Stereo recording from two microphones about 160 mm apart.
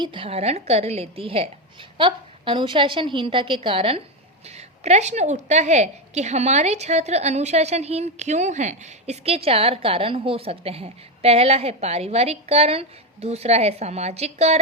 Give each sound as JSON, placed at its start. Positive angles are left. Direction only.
{"t": 0.0, "sound": "a woman's voice", "side_deg": -35}